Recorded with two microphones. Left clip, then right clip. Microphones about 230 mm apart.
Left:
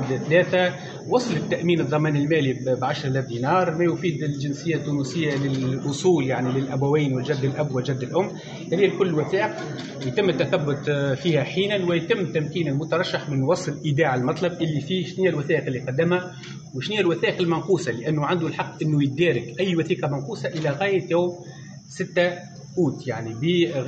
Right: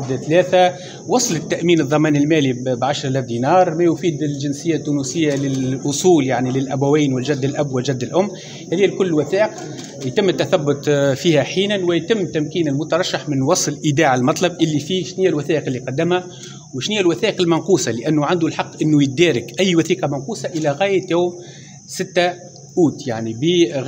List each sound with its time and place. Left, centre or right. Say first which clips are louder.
0.3 s a man's voice: right 6 dB; right